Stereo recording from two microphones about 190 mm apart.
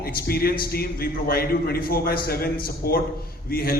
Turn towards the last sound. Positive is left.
turn(degrees=50)  # may be behind; listen again after turning